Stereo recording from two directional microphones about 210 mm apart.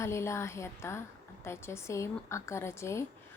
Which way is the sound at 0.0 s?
15° left (ahead or behind).